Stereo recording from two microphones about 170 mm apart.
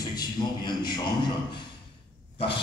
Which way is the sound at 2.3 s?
30° left (ahead or behind).